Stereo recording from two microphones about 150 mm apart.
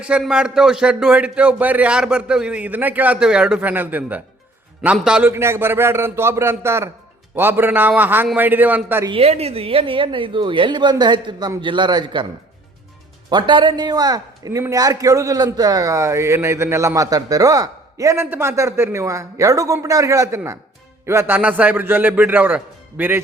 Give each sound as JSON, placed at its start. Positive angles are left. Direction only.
{"t": 0.0, "sound": "a man's voice", "side_deg": -5}
{"t": 5.3, "sound": "a man's voice", "side_deg": -15}
{"t": 9.0, "sound": "a woman's voice", "side_deg": -40}
{"t": 13.3, "sound": "a man's voice", "side_deg": -30}